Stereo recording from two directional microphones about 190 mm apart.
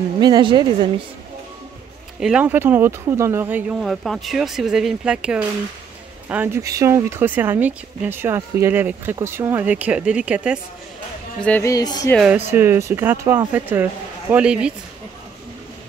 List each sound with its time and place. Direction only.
0.2 s a woman's voice: 25° right (ahead or behind)
2.1 s speech: 5° right (ahead or behind)
11.4 s speech: 10° left (ahead or behind)
12.4 s speech: 10° right (ahead or behind)